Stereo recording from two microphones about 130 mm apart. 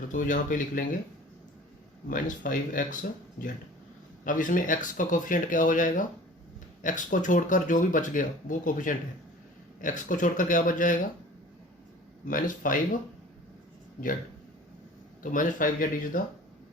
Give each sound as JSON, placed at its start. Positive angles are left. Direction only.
{"t": 0.1, "sound": "speech", "side_deg": 80}
{"t": 2.0, "sound": "speech", "side_deg": 90}
{"t": 12.3, "sound": "speech", "side_deg": 90}
{"t": 15.2, "sound": "speech", "side_deg": 90}